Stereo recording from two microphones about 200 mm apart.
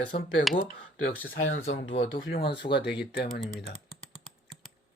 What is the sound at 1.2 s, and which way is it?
Speech, 90° left.